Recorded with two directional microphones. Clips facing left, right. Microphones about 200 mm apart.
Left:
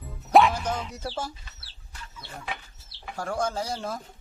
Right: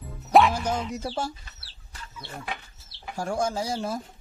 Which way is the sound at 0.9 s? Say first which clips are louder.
Right 3 dB; 15° right (ahead or behind).